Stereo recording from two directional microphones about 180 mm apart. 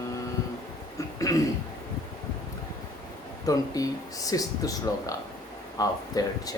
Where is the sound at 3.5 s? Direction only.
20° left (ahead or behind).